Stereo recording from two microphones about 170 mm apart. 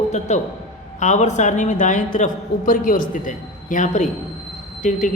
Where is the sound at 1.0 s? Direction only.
45° left (ahead or behind).